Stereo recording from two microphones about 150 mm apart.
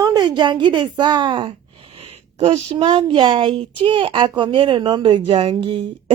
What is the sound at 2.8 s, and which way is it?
Speech, 35° right (ahead or behind).